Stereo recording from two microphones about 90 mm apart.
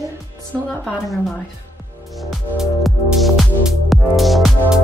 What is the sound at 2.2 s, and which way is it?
A woman's voice, centre (ahead or behind).